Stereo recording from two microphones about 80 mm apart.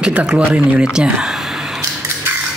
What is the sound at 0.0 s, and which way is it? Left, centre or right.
Speech, centre.